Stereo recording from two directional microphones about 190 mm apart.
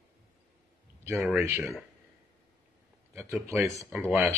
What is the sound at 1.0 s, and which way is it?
Speech, 15° right (ahead or behind).